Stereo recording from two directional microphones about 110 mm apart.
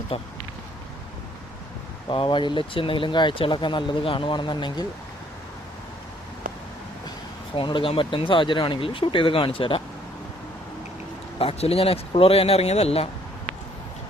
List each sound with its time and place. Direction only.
0.1 s speech: 60° left (ahead or behind)
2.0 s speech: 50° left (ahead or behind)
7.5 s speech: 50° left (ahead or behind)
11.3 s speech: 60° left (ahead or behind)